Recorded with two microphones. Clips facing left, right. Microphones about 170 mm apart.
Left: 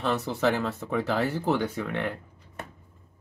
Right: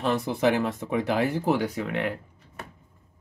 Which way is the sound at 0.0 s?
15° right (ahead or behind).